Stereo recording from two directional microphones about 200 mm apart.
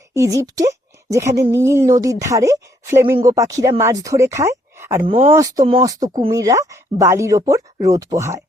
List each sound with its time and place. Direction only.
0.1 s a woman's voice: 15° right (ahead or behind)
4.9 s speech: 30° right (ahead or behind)
5.3 s speech: 15° right (ahead or behind)